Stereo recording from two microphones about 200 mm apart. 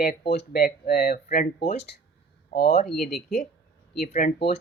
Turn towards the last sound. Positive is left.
turn(degrees=45)  # may be behind; listen again after turning